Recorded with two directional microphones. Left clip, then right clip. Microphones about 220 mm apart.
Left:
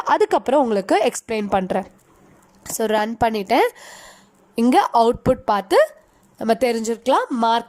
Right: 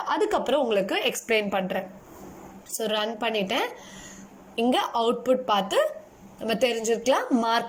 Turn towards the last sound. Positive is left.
turn(degrees=20)  # may be behind; listen again after turning